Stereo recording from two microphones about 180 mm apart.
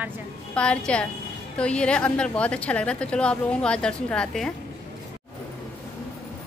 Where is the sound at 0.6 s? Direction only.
5° left (ahead or behind).